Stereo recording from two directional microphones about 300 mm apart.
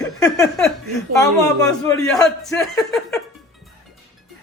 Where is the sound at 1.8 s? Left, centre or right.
Centre.